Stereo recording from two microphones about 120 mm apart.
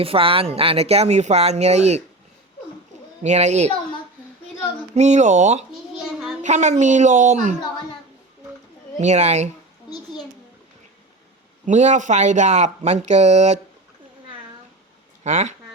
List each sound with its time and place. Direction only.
0.0 s speech: 50° right (ahead or behind); by 2.0 s 65° right (ahead or behind)
3.2 s speech: 70° right (ahead or behind)
4.9 s speech: 75° right (ahead or behind)
6.0 s child singing: 5° right (ahead or behind)
6.4 s a woman's voice: 75° right (ahead or behind)
9.0 s speech: 70° right (ahead or behind)
9.9 s a sound: 35° left (ahead or behind)
11.6 s speech: 80° right
15.2 s speech: 80° right